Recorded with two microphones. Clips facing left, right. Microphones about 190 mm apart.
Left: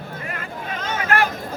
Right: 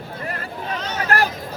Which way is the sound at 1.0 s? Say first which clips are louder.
Even; 35° right (ahead or behind).